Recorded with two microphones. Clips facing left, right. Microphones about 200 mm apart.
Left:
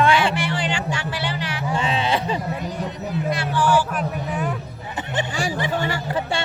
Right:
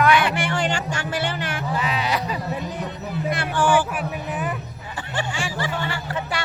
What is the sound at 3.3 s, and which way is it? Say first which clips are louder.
Speech: even; 50° right (ahead or behind).